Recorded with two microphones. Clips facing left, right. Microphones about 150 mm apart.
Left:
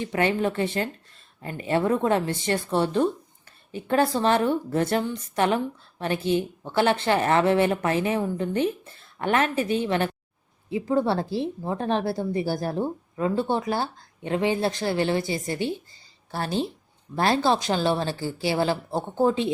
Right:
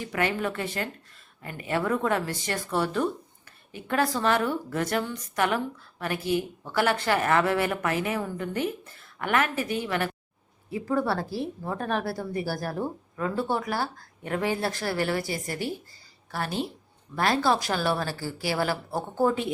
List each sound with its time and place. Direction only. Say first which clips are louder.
0.0 s speech: left 4 dB; 30° left (ahead or behind)